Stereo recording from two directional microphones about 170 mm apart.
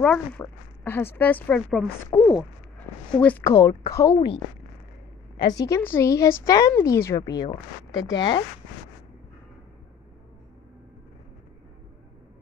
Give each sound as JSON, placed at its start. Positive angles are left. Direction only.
{"t": 0.0, "sound": "speech", "side_deg": 10}
{"t": 5.4, "sound": "speech", "side_deg": 20}